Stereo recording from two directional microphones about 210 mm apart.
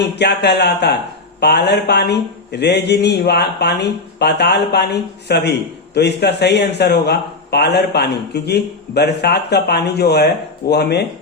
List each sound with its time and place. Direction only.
0.2 s speech: 55° left (ahead or behind)